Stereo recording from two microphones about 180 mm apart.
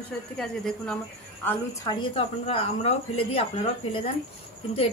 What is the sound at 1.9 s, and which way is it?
Speech, 30° left (ahead or behind).